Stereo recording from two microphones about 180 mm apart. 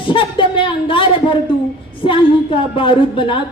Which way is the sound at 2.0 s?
30° left (ahead or behind).